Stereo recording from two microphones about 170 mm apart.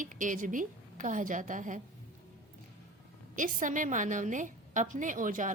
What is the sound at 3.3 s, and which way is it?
A woman's voice, 50° right (ahead or behind).